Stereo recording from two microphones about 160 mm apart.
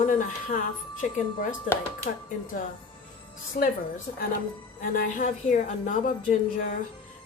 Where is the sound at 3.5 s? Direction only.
60° left (ahead or behind).